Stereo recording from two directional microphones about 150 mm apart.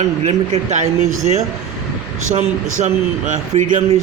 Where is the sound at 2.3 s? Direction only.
50° right (ahead or behind).